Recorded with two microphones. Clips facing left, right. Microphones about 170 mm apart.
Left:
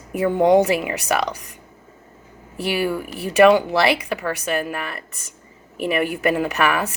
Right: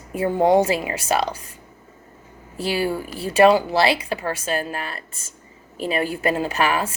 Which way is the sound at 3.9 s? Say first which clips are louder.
Left 1 dB; 65° left (ahead or behind).